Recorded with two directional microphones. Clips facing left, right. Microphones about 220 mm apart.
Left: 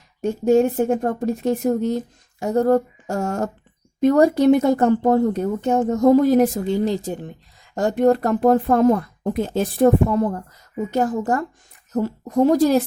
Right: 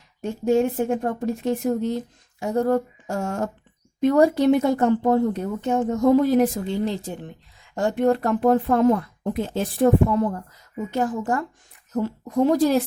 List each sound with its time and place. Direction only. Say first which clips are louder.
0.2 s speech: left 4 dB; 40° left (ahead or behind)